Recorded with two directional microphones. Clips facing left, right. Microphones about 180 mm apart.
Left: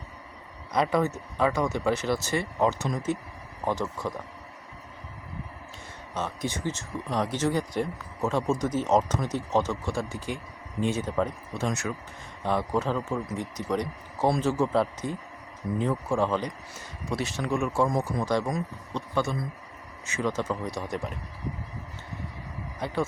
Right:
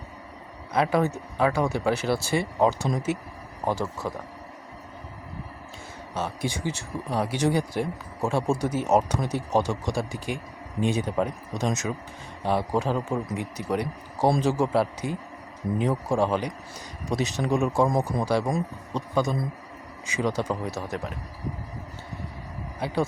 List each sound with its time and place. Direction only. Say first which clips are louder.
0.7 s speech: right 2 dB; 5° right (ahead or behind)
6.1 s speech: right 2 dB; 10° right (ahead or behind)
20.1 s speech: right 2 dB; 10° right (ahead or behind)